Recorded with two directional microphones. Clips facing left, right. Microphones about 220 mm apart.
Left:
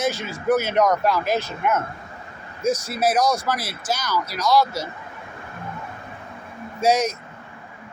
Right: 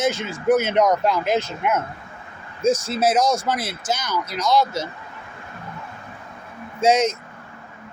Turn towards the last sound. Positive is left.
turn(degrees=-25)  # may be behind; listen again after turning